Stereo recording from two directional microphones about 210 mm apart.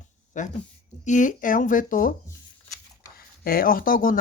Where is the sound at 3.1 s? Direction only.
45° left (ahead or behind).